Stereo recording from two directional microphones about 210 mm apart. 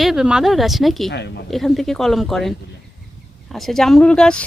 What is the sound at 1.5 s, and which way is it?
Speech, centre (ahead or behind).